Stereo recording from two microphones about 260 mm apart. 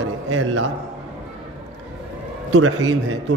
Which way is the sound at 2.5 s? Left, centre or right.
Right.